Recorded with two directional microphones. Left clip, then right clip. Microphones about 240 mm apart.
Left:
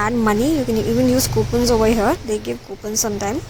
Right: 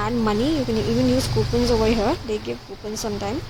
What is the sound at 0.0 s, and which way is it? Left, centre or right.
Speech, centre.